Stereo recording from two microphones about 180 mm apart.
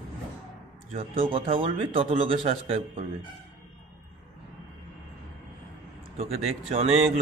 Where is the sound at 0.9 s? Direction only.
30° right (ahead or behind).